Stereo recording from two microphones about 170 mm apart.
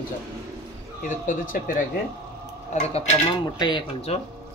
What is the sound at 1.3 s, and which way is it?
Speech, 55° left (ahead or behind).